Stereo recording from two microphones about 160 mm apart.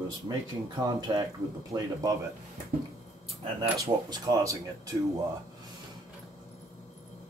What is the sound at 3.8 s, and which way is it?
Speech, 20° right (ahead or behind).